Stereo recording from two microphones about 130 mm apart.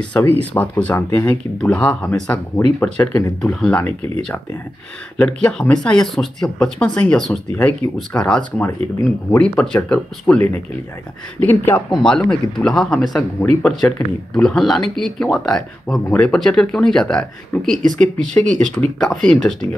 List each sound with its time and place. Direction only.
0.2 s speech: 10° left (ahead or behind)